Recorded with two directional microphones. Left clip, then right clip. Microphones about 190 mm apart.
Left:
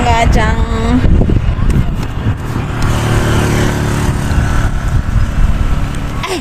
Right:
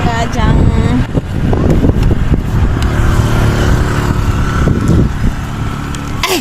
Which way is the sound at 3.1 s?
50° left (ahead or behind).